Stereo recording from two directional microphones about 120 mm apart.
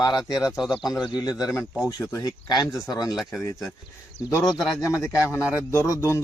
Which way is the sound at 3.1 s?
Centre (ahead or behind).